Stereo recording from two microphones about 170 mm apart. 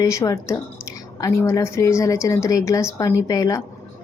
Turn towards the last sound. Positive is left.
turn(degrees=20)  # may be behind; listen again after turning